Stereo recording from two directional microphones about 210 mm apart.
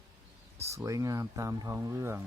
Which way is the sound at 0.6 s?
15° right (ahead or behind).